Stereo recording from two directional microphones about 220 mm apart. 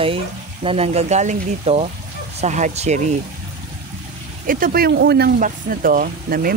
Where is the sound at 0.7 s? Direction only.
25° right (ahead or behind).